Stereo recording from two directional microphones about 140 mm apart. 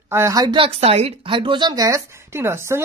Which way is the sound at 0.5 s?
45° right (ahead or behind).